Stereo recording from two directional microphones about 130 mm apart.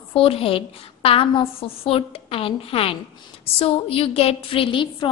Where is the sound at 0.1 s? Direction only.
45° left (ahead or behind).